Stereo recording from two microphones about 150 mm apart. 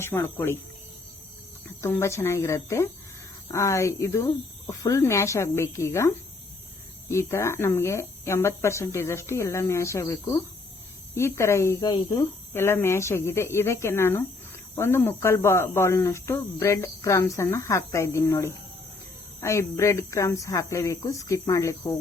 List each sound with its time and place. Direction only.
0.0 s speech: 15° left (ahead or behind)
1.8 s speech: 20° left (ahead or behind)
12.5 s speech: 15° left (ahead or behind)